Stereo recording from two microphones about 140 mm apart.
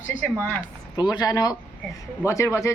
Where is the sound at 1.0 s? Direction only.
30° left (ahead or behind).